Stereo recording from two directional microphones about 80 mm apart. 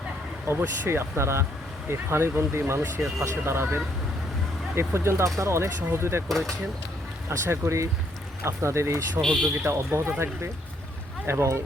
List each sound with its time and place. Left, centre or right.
0.4 s speech: right
6.2 s speech: centre
7.3 s speech: right